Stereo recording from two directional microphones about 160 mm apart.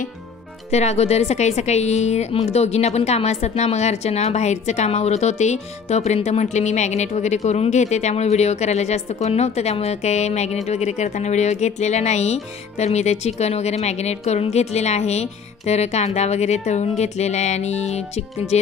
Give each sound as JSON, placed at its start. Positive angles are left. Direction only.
{"t": 0.7, "sound": "a woman's voice", "side_deg": 45}